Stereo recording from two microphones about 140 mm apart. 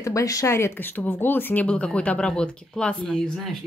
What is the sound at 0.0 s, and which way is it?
Speech, 25° left (ahead or behind).